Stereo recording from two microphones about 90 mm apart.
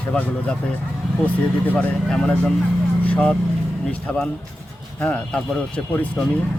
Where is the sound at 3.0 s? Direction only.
15° left (ahead or behind).